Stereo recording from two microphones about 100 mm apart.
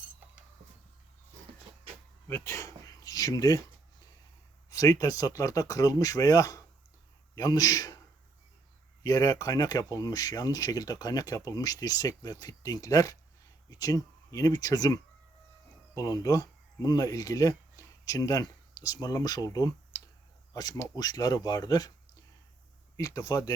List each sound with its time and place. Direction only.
2.2 s a sound: 25° left (ahead or behind)
4.7 s speech: 35° left (ahead or behind)
9.0 s speech: 35° left (ahead or behind)
16.0 s speech: 35° left (ahead or behind)
19.9 s clicking: 20° left (ahead or behind)
20.5 s speech: 40° left (ahead or behind)
23.0 s speech: 35° left (ahead or behind)